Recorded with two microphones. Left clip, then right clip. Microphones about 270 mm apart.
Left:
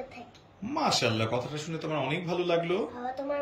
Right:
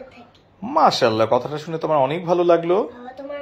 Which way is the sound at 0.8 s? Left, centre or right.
Centre.